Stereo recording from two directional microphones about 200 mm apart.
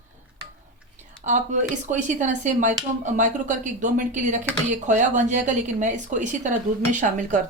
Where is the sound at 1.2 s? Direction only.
40° right (ahead or behind).